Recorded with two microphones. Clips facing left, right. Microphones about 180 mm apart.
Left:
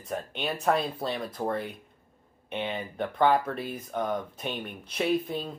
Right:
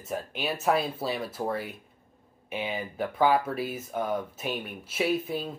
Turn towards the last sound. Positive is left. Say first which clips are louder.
# left 1 dB
turn(degrees=-5)  # may be behind; listen again after turning